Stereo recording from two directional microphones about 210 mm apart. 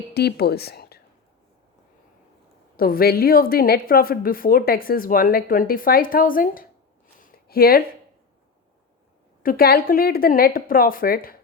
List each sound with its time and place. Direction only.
0.1 s speech: 50° left (ahead or behind)
2.7 s a woman's voice: 45° left (ahead or behind)
7.2 s a sound: 45° left (ahead or behind)
9.4 s a woman's voice: 45° left (ahead or behind)